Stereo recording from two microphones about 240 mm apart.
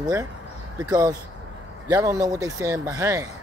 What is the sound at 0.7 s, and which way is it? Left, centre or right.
Speech, centre.